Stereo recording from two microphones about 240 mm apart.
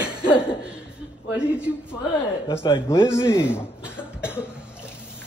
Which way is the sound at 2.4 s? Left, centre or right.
Centre.